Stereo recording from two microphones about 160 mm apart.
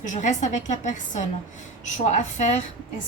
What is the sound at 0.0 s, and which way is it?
A woman's voice, 50° left (ahead or behind).